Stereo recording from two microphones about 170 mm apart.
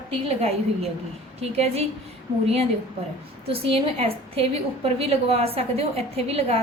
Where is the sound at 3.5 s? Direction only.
35° right (ahead or behind).